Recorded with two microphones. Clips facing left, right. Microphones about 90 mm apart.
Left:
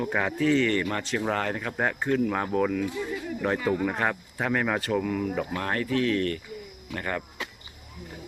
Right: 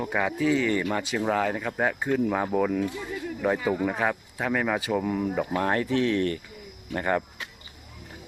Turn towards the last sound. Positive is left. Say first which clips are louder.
# right 5 dB
turn(degrees=-20)  # may be behind; listen again after turning